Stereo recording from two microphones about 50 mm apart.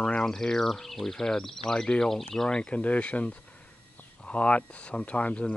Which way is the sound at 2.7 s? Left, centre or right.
Left.